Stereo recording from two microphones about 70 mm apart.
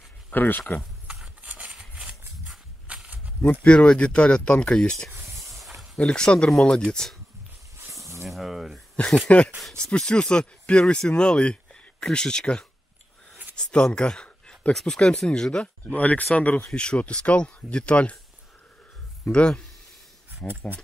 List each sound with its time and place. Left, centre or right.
0.3 s speech: left
1.4 s a sound: right
1.7 s a sound: centre
3.6 s speech: centre
5.1 s snake: right
5.9 s speech: centre
7.7 s snake: right
8.3 s a sound: centre
9.6 s speech: centre
19.3 s speech: centre